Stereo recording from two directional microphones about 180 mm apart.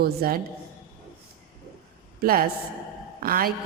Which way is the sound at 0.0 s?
55° right (ahead or behind).